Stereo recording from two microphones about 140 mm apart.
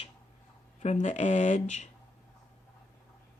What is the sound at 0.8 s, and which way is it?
Speech, 55° left (ahead or behind).